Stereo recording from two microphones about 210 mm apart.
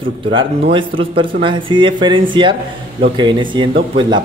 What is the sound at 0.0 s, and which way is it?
Speech, 25° right (ahead or behind).